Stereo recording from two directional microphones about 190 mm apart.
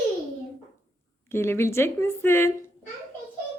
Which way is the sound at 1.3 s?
15° left (ahead or behind).